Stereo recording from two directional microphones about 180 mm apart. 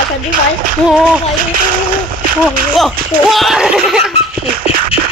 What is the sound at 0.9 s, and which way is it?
Speech, 5° right (ahead or behind).